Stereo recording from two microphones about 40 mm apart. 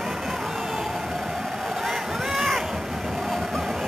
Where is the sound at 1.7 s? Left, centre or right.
Centre.